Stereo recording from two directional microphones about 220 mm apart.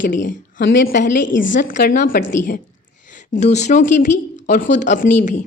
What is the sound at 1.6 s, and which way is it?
A woman's voice, 40° left (ahead or behind).